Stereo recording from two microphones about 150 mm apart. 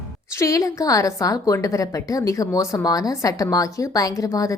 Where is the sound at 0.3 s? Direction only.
20° left (ahead or behind).